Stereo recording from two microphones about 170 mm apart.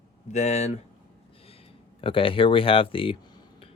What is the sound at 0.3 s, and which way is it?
Speech, 40° left (ahead or behind).